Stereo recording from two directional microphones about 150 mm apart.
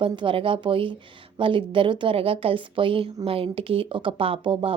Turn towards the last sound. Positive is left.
turn(degrees=-35)  # may be behind; listen again after turning